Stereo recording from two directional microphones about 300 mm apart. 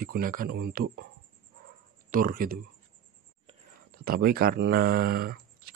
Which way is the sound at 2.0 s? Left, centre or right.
Right.